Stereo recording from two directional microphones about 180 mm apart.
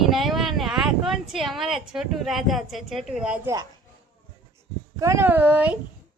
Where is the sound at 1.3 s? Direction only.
Centre (ahead or behind).